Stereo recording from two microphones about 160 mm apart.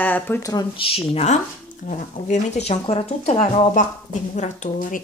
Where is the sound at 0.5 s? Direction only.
35° left (ahead or behind).